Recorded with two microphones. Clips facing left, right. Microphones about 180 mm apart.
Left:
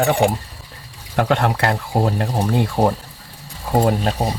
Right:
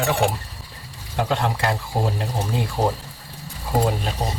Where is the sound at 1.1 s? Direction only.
65° left (ahead or behind).